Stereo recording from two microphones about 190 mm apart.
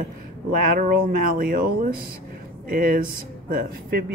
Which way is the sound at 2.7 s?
45° right (ahead or behind).